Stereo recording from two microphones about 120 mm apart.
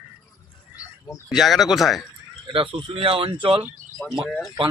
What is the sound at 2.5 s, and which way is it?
Speech, 50° right (ahead or behind).